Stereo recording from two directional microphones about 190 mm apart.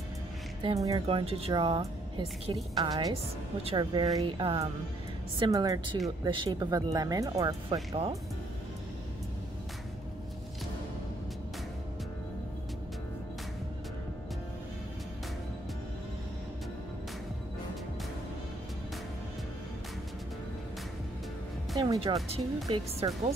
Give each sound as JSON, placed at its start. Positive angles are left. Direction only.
{"t": 0.6, "sound": "speech", "side_deg": -20}
{"t": 21.7, "sound": "music", "side_deg": -20}
{"t": 23.0, "sound": "speech", "side_deg": -25}